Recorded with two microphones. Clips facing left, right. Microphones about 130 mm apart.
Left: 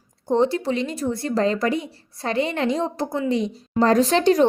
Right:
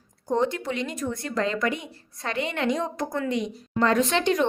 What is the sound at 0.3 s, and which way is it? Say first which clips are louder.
Speech: left 5 dB; 30° left (ahead or behind).